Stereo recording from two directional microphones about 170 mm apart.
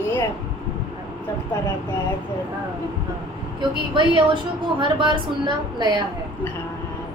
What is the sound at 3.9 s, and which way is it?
A woman's voice, 30° right (ahead or behind).